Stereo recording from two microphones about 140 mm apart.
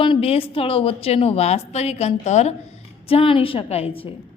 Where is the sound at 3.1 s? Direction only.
40° left (ahead or behind).